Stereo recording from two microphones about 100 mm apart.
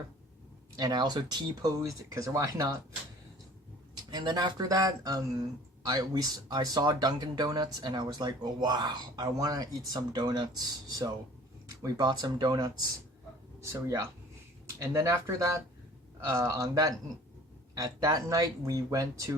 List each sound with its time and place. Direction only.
0.8 s speech: 45° right (ahead or behind)
4.1 s speech: 45° right (ahead or behind)
13.6 s speech: 30° right (ahead or behind)